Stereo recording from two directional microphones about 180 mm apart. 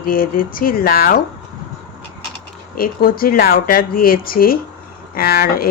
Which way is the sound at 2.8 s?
55° left (ahead or behind).